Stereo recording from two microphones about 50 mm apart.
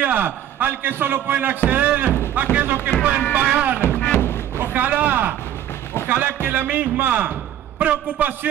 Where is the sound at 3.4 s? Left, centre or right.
Centre.